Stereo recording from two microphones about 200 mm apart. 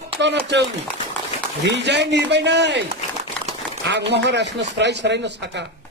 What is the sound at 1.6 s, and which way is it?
Speech, 60° right (ahead or behind).